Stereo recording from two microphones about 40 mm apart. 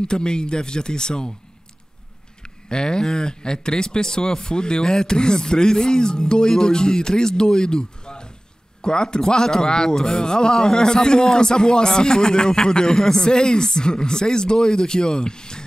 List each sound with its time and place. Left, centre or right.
0.1 s speech: left
2.4 s speech: left